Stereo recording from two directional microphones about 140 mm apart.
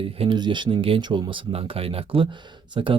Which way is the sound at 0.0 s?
40° right (ahead or behind).